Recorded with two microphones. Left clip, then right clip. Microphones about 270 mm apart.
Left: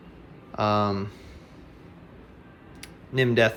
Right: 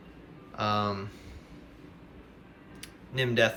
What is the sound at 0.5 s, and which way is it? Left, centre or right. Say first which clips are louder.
Speech: left 5 dB; centre.